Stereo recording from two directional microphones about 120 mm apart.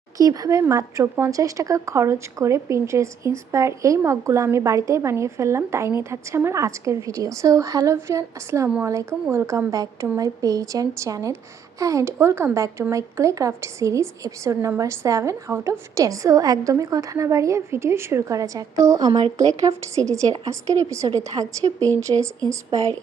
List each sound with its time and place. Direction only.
0.2 s speech: 30° right (ahead or behind)